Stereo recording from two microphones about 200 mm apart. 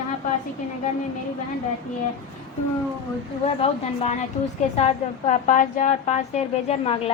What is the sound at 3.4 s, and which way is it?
Speech, 30° left (ahead or behind).